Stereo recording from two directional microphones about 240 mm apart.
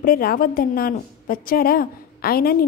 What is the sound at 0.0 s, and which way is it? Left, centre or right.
A woman's voice, left.